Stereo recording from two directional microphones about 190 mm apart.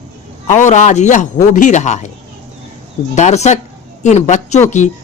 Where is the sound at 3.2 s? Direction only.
35° left (ahead or behind).